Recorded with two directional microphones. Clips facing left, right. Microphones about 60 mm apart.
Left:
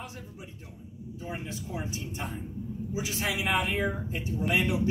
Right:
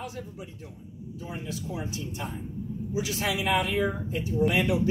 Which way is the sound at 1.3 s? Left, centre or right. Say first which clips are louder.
Right 2 dB; left.